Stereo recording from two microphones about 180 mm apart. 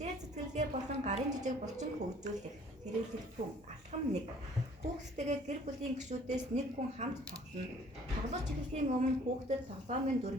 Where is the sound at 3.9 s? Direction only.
40° right (ahead or behind).